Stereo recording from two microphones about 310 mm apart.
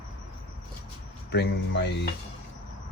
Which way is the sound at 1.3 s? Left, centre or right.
Left.